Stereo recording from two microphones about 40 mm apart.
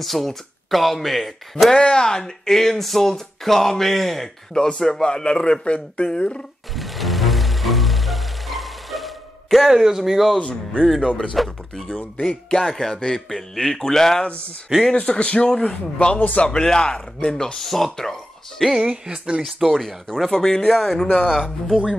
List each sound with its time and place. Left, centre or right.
0.0 s speech: centre
1.8 s a man's voice: centre
6.7 s music: centre
10.4 s a man's voice: left
11.3 s speech: centre
14.2 s a man's voice: left
16.2 s speech: left
16.4 s a man's voice: centre
17.6 s speech: centre
18.7 s speech: centre
19.4 s speech: centre
20.1 s speech: centre